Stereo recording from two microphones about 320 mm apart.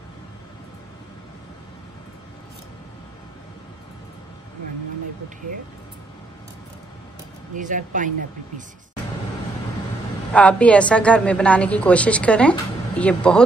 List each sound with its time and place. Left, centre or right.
7.5 s speech: right
10.3 s a woman's voice: centre